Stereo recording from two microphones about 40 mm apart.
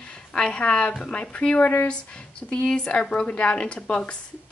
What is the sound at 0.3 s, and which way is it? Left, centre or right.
A woman's voice, left.